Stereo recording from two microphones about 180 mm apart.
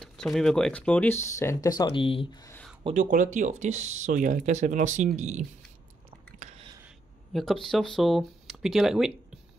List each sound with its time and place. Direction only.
0.0 s speech: 5° left (ahead or behind); by 2.2 s 30° left (ahead or behind)
2.9 s speech: 45° right (ahead or behind)
6.4 s a sound: 35° right (ahead or behind)
7.3 s speech: centre (ahead or behind)